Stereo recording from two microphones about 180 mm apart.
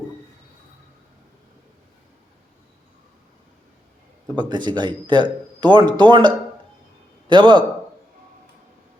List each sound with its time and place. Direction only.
4.4 s speech: 25° right (ahead or behind)